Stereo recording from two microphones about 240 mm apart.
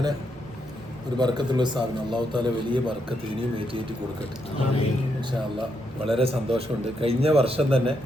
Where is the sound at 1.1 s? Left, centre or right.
Centre.